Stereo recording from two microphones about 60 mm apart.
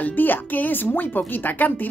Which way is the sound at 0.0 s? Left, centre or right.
Left.